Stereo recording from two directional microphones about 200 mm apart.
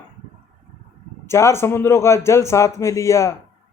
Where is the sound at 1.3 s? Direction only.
15° left (ahead or behind).